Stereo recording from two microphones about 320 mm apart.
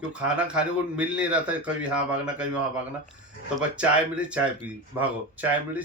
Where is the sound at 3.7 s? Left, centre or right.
Centre.